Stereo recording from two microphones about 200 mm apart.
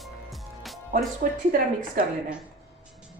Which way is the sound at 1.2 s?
45° right (ahead or behind).